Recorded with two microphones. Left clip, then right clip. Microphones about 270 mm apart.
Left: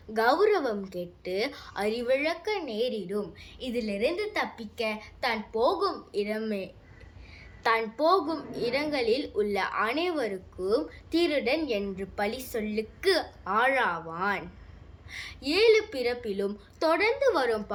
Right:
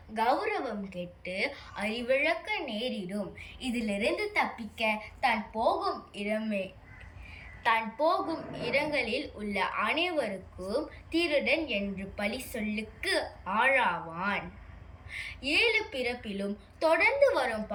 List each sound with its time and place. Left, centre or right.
0.1 s a woman's voice: centre